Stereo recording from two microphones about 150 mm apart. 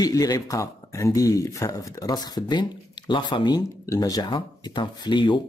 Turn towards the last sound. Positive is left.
turn(degrees=30)  # may be behind; listen again after turning